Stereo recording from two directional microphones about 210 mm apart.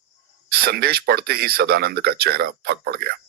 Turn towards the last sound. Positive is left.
turn(degrees=-50)  # may be behind; listen again after turning